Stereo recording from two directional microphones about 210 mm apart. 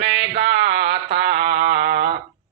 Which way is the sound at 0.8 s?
50° right (ahead or behind).